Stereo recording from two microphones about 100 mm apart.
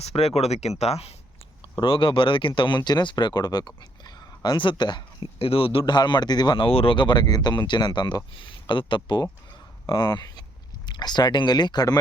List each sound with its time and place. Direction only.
0.0 s speech: 90° left
1.7 s speech: 55° left (ahead or behind)
4.0 s a sound: 45° left (ahead or behind)
5.4 s speech: 70° left (ahead or behind)
5.8 s speech: 50° left (ahead or behind)
6.7 s speech: 65° left (ahead or behind); by 11.9 s 45° left (ahead or behind)